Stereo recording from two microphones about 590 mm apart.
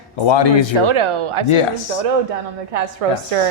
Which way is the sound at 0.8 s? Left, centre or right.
Right.